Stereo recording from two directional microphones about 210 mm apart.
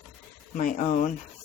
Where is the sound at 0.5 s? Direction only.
40° left (ahead or behind).